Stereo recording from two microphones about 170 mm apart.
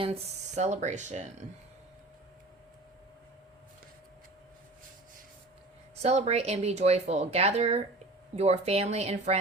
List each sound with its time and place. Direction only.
0.0 s speech: 40° right (ahead or behind)
6.0 s speech: 40° right (ahead or behind)